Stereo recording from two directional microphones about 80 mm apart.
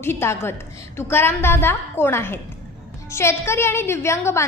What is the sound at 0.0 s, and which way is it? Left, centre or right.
A woman's voice, left.